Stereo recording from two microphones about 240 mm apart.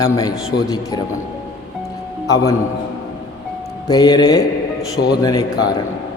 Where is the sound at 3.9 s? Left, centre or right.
Centre.